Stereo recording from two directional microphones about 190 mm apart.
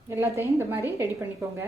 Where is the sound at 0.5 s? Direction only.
15° right (ahead or behind).